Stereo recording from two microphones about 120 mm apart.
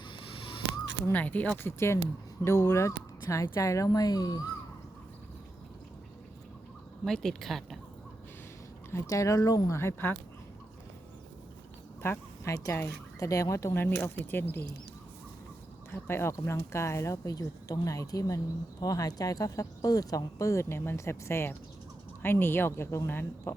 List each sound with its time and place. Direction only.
0.2 s a sound: 50° left (ahead or behind)
1.0 s speech: 15° left (ahead or behind); by 4.4 s 35° left (ahead or behind)
7.0 s speech: 5° left (ahead or behind)
8.9 s speech: 25° left (ahead or behind)
12.0 s speech: 20° left (ahead or behind)
15.9 s speech: 20° left (ahead or behind)